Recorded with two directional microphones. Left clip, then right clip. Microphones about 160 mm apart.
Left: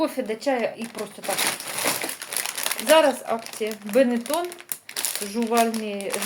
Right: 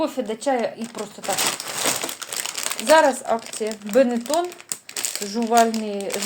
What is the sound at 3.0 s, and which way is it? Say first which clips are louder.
Speech: right 2 dB; 30° right (ahead or behind).